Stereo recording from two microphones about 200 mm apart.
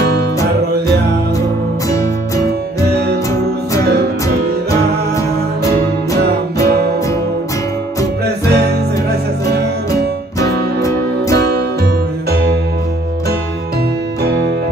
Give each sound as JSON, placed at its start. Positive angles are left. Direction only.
{"t": 1.9, "sound": "music", "side_deg": 15}
{"t": 5.7, "sound": "music", "side_deg": -50}